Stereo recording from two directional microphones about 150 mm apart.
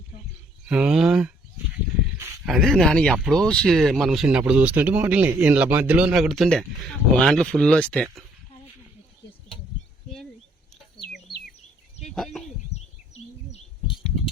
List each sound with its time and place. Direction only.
0.7 s speech: 5° right (ahead or behind)
2.5 s speech: centre (ahead or behind)
12.0 s bird: 5° left (ahead or behind)
12.7 s bird: 45° left (ahead or behind)